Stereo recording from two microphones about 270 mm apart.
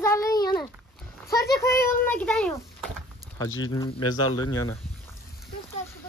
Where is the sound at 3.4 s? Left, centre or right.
Left.